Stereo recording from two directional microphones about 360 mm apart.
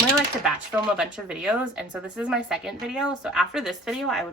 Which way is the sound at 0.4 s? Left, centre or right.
Centre.